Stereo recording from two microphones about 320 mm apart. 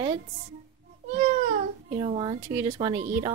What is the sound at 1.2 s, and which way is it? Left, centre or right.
Cat, centre.